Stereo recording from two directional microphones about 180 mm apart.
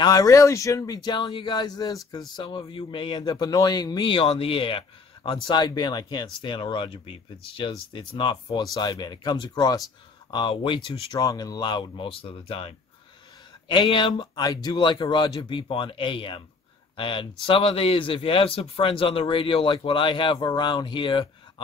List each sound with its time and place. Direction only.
0.0 s speech: 20° left (ahead or behind)